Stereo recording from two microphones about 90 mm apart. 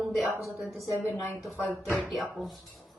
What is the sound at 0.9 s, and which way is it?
Speech, 20° right (ahead or behind).